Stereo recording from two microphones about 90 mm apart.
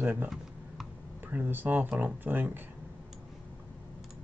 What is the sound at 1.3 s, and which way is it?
Speech, 20° right (ahead or behind).